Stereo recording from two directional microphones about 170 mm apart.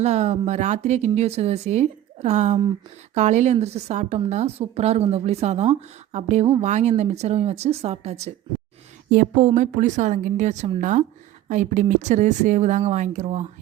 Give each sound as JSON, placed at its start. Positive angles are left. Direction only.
{"t": 0.0, "sound": "a woman's voice", "side_deg": -40}